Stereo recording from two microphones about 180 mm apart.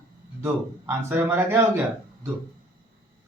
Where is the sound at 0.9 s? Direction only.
15° right (ahead or behind).